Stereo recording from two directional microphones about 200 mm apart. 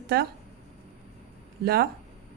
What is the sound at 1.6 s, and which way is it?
Speech, 50° right (ahead or behind).